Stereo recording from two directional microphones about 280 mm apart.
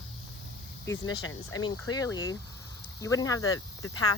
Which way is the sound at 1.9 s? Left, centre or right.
Centre.